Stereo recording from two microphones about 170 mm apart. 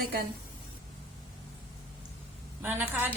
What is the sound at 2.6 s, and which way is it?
Speech, 10° right (ahead or behind).